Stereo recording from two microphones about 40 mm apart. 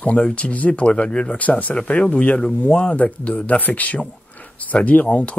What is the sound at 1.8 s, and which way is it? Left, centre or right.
Speech, left.